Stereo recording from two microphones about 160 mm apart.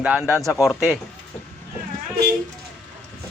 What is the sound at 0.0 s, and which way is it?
Speech, 5° right (ahead or behind).